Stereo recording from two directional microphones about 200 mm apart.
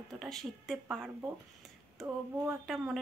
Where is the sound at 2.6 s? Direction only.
Centre (ahead or behind).